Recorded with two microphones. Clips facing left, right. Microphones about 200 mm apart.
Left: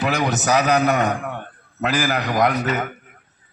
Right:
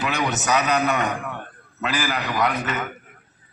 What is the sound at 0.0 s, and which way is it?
A man's voice, 35° left (ahead or behind).